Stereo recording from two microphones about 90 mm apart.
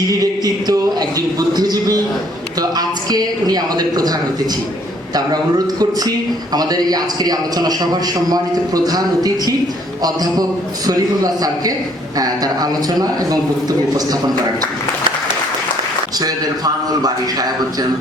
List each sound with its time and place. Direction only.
0.1 s speech: 40° right (ahead or behind)
16.2 s speech: 45° right (ahead or behind)